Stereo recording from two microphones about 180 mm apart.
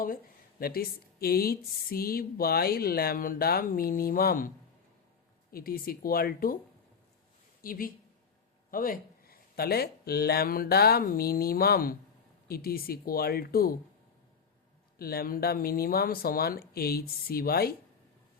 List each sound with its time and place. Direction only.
0.6 s speech: 55° left (ahead or behind)
7.6 s speech: 50° left (ahead or behind)
14.9 s speech: 55° left (ahead or behind)